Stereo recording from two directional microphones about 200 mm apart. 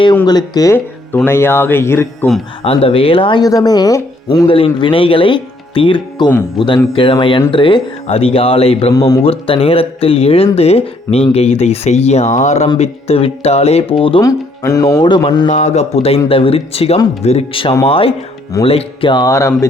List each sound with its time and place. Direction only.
0.3 s speech: 20° left (ahead or behind)
2.6 s speech: 30° left (ahead or behind)
8.9 s speech: 15° left (ahead or behind)
9.2 s speech: 30° left (ahead or behind)
15.4 s speech: 35° left (ahead or behind); by 19.5 s 15° left (ahead or behind)